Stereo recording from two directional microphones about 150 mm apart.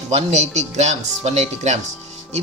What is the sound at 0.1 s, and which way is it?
Speech, 45° right (ahead or behind).